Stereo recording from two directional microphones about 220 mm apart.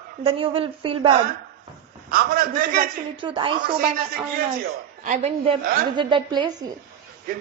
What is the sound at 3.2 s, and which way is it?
Speech, 20° right (ahead or behind).